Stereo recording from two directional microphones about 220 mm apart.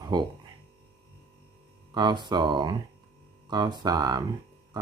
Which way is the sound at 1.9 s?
20° right (ahead or behind).